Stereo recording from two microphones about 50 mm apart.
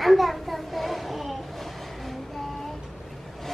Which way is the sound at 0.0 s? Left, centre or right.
Centre.